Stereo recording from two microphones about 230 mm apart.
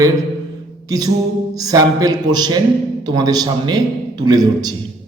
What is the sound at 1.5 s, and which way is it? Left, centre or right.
A man's voice, centre.